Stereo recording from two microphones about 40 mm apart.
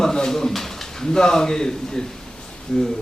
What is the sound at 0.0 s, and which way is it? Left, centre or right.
Speech, centre.